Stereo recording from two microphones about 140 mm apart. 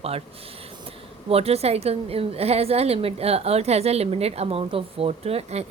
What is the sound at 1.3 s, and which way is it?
A woman's voice, 45° right (ahead or behind).